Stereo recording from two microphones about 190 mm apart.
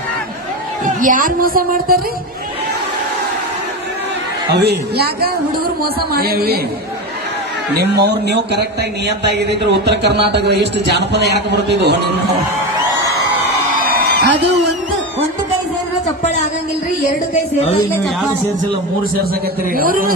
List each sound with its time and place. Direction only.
1.0 s a woman's voice: 45° right (ahead or behind)
4.5 s a woman's voice: 60° right (ahead or behind)
7.8 s speech: 60° right (ahead or behind)
13.9 s a sound: 55° right (ahead or behind)
19.7 s a woman's voice: 50° right (ahead or behind)